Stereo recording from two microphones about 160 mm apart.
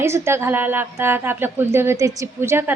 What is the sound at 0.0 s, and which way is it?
A woman's voice, 15° right (ahead or behind).